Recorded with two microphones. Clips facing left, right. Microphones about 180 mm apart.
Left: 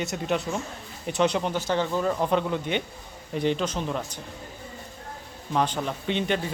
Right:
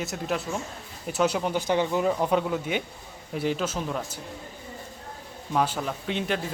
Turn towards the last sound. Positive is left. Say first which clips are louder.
# left 2 dB
turn(degrees=0)  # may be behind; listen again after turning